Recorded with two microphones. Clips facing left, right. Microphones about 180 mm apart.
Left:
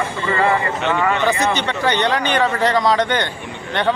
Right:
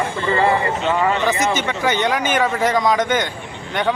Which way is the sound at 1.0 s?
20° right (ahead or behind).